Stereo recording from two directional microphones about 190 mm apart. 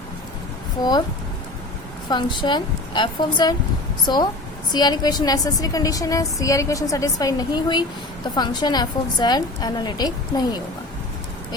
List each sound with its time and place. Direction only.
2.0 s a woman's voice: 25° left (ahead or behind)